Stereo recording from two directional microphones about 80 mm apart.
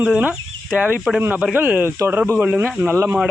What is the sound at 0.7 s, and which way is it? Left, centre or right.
Speech, centre.